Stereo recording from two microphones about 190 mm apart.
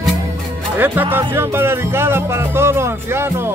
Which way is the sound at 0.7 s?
10° right (ahead or behind).